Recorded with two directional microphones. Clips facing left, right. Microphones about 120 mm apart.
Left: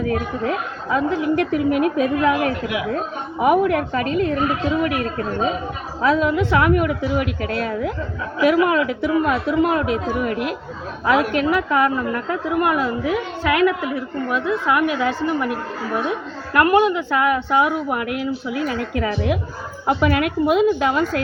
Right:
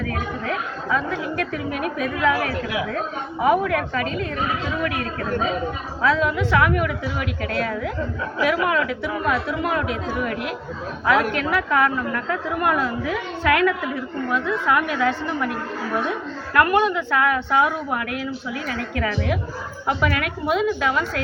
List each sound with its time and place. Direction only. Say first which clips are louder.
0.1 s a woman's voice: left 4 dB; 25° left (ahead or behind)
16.8 s a woman's voice: left 2 dB; 15° left (ahead or behind)